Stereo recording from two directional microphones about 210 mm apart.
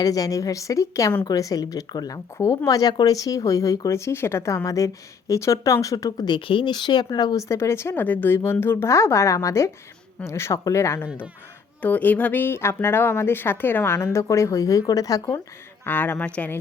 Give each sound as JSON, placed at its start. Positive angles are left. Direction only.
{"t": 0.0, "sound": "a woman's voice", "side_deg": 15}